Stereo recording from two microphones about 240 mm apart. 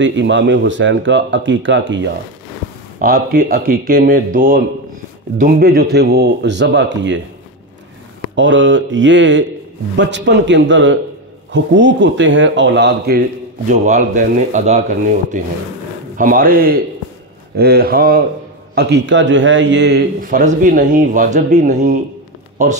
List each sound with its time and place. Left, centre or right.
0.0 s speech: right
3.0 s a man's voice: right
8.4 s speech: right
13.7 s a man's voice: right